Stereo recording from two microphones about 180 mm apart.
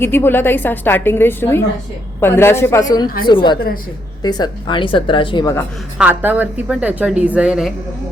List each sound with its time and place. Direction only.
0.0 s a woman's voice: 10° left (ahead or behind)
6.0 s a woman's voice: 10° right (ahead or behind)